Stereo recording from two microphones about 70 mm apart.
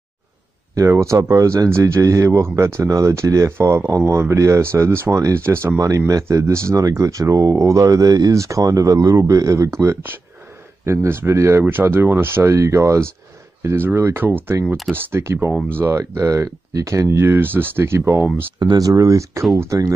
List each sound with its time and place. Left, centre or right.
0.7 s speech: right
5.8 s speech: right
10.9 s speech: right
14.5 s speech: right
14.9 s speech: right
15.8 s speech: right
18.6 s speech: right
18.9 s speech: right